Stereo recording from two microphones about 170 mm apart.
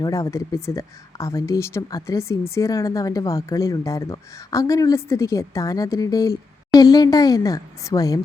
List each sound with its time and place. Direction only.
0.0 s speech: 20° left (ahead or behind)